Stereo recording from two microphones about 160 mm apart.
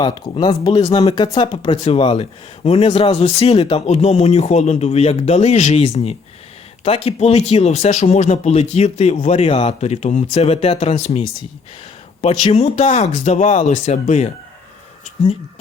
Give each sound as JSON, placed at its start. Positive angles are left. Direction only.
{"t": 0.0, "sound": "speech", "side_deg": 25}
{"t": 12.4, "sound": "speech", "side_deg": 45}